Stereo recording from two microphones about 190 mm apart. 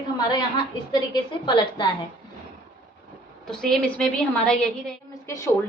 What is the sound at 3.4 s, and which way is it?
A woman's voice, centre (ahead or behind).